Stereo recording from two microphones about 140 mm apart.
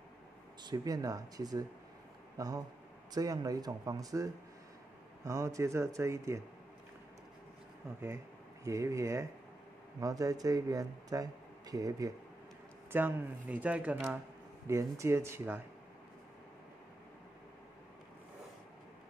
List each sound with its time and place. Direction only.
0.7 s a man's voice: 25° right (ahead or behind)
8.6 s a man's voice: 20° right (ahead or behind)
12.9 s a man's voice: 10° right (ahead or behind)